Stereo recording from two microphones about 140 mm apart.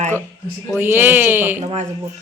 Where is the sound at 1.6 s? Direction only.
50° right (ahead or behind).